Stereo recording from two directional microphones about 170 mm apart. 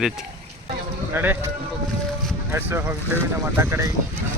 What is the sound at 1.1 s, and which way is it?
Speech, 10° right (ahead or behind).